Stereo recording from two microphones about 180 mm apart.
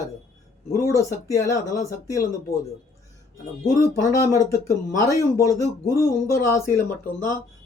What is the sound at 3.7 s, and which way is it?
Speech, 20° left (ahead or behind).